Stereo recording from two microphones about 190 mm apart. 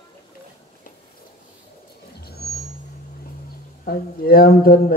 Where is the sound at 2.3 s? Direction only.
55° left (ahead or behind).